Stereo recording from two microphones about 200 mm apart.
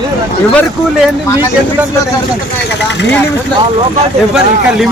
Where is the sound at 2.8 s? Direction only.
60° left (ahead or behind).